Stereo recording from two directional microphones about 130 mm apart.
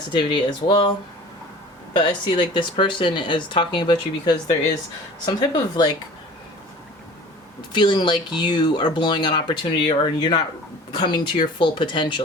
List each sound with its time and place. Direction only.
0.1 s speech: 40° left (ahead or behind)
1.9 s speech: 35° left (ahead or behind)
7.7 s speech: 35° left (ahead or behind)